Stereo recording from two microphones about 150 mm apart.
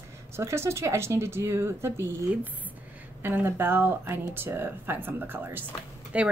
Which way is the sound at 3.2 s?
15° right (ahead or behind).